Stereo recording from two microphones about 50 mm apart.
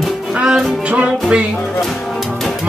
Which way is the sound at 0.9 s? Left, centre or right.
Right.